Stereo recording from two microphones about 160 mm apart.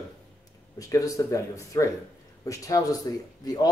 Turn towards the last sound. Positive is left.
turn(degrees=25)  # may be behind; listen again after turning